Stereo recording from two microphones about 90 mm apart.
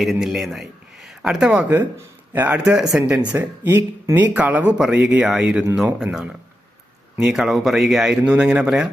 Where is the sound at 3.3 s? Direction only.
25° right (ahead or behind).